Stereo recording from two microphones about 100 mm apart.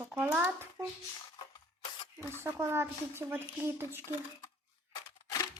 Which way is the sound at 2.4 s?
25° right (ahead or behind).